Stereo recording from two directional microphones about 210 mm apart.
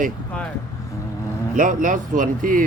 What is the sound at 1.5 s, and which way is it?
Speech, 40° right (ahead or behind).